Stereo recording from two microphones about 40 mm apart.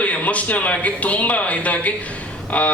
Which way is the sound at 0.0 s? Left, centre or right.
Left.